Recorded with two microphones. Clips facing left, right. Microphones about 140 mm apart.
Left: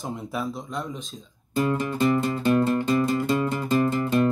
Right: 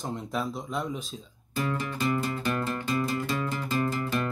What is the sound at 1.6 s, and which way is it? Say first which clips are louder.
Music: left 7 dB; 20° left (ahead or behind).